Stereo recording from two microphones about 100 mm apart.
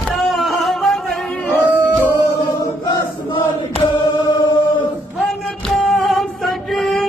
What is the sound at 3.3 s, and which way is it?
Chant, 60° left (ahead or behind).